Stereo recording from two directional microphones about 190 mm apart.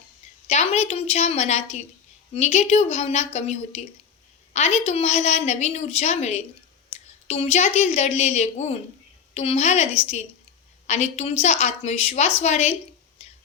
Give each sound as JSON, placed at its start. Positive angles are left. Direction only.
{"t": 0.4, "sound": "a woman's voice", "side_deg": 35}
{"t": 13.2, "sound": "whispering", "side_deg": 35}